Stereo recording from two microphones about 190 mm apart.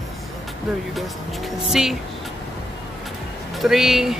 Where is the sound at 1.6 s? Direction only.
Centre (ahead or behind).